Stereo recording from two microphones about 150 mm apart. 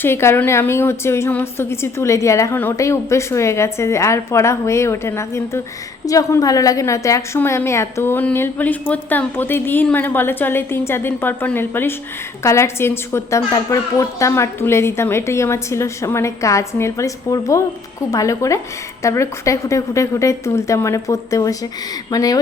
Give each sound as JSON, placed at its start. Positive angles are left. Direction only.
{"t": 0.0, "sound": "a woman's voice", "side_deg": 15}